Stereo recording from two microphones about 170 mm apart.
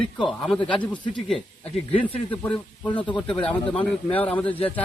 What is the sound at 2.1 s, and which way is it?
A man's voice, 10° left (ahead or behind).